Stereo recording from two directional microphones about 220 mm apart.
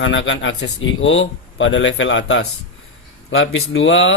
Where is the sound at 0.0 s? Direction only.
55° left (ahead or behind).